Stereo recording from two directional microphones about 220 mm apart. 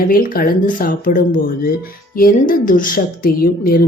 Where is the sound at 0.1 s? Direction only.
40° left (ahead or behind).